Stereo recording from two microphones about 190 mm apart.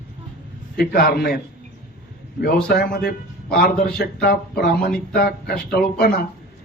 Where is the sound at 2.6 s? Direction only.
55° left (ahead or behind).